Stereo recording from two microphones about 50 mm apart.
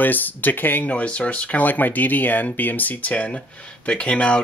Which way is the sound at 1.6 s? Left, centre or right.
Left.